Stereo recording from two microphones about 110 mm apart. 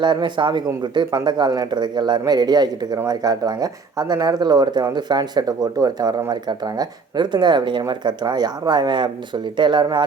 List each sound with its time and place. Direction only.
0.0 s speech: 45° right (ahead or behind)